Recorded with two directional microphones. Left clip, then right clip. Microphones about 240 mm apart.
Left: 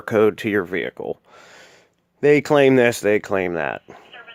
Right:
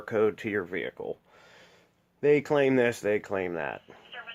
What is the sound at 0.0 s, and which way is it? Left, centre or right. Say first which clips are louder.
Speech: left 9 dB; left.